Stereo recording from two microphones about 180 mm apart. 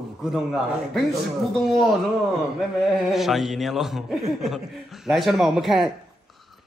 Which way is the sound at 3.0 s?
Centre (ahead or behind).